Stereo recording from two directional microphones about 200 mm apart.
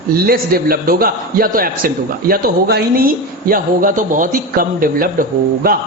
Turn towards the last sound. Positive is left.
turn(degrees=-45)  # may be behind; listen again after turning